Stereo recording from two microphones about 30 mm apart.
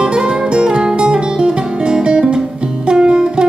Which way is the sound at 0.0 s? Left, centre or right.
Right.